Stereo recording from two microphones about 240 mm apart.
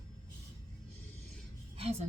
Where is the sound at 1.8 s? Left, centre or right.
Right.